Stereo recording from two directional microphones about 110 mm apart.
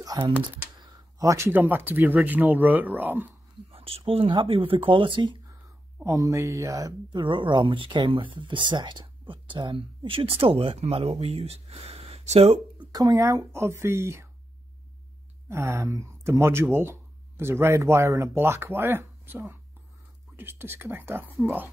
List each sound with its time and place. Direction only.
1.2 s speech: 30° right (ahead or behind)
3.7 s speech: 60° right (ahead or behind)
6.0 s speech: 30° right (ahead or behind)
7.1 s speech: 50° right (ahead or behind); by 12.5 s 65° right (ahead or behind)
12.7 s speech: 35° right (ahead or behind)
15.4 s speech: 25° right (ahead or behind)